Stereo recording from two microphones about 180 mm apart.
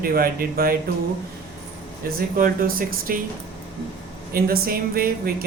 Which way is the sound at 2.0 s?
55° right (ahead or behind).